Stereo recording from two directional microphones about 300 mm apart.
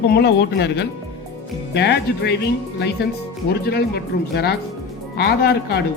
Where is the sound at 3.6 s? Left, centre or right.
Left.